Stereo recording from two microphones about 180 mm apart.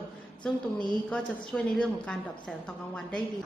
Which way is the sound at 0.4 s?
5° left (ahead or behind).